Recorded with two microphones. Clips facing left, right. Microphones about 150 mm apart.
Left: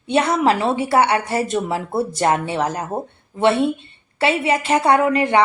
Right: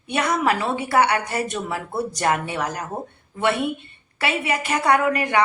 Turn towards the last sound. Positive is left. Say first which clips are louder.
# left 4 dB
turn(degrees=25)  # may be behind; listen again after turning